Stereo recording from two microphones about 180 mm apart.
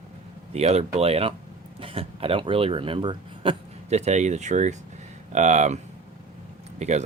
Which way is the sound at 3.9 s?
40° right (ahead or behind).